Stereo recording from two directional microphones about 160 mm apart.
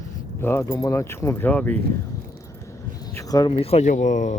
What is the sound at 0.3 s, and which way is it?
Speech, 15° left (ahead or behind).